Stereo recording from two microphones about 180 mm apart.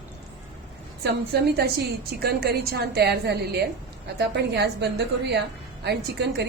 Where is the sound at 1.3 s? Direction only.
65° right (ahead or behind).